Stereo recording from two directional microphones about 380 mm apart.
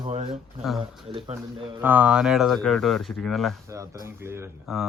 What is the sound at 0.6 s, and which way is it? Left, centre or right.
Speech, centre.